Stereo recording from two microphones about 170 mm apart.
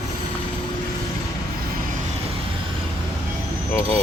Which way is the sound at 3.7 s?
15° left (ahead or behind).